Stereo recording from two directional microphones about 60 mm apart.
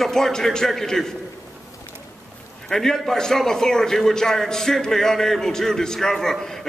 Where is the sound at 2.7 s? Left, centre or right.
Centre.